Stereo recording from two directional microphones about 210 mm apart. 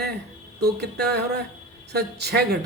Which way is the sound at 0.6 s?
50° right (ahead or behind).